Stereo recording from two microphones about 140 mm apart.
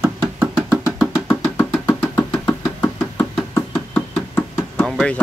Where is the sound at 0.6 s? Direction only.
10° right (ahead or behind).